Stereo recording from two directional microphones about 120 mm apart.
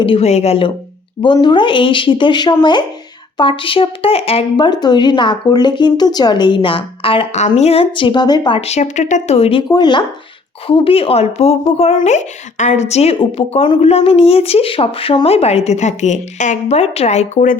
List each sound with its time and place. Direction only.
0.0 s a woman's voice: 45° left (ahead or behind)
0.3 s a woman's voice: 60° left (ahead or behind)
1.2 s a woman's voice: 40° left (ahead or behind)
4.5 s speech: 40° left (ahead or behind)
7.3 s a woman's voice: 70° left (ahead or behind); by 8.6 s 40° left (ahead or behind)
8.6 s a woman's voice: 70° left (ahead or behind); by 9.6 s 55° left (ahead or behind)
9.6 s speech: 35° left (ahead or behind)
10.7 s a woman's voice: 50° left (ahead or behind)
12.0 s a woman's voice: 85° left